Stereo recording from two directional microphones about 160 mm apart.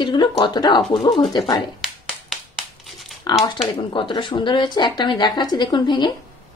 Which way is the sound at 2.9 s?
Centre (ahead or behind).